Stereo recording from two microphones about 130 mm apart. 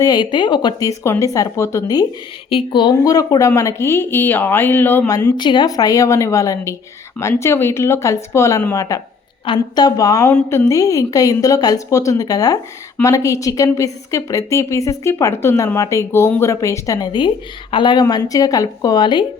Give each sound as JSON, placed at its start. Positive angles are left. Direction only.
{"t": 0.0, "sound": "a woman's voice", "side_deg": 35}
{"t": 2.5, "sound": "a woman's voice", "side_deg": 40}
{"t": 5.0, "sound": "a woman's voice", "side_deg": 25}
{"t": 18.0, "sound": "a woman's voice", "side_deg": 25}